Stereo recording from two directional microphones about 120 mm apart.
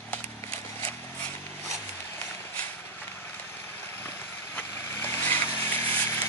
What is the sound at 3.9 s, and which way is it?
Vehicle, 15° left (ahead or behind).